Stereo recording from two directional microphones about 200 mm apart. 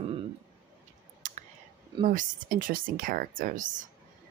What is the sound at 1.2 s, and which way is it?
Whispering, 40° right (ahead or behind).